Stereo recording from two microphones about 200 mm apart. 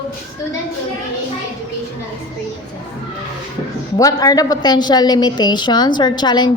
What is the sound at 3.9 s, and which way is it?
A woman's voice, 20° left (ahead or behind).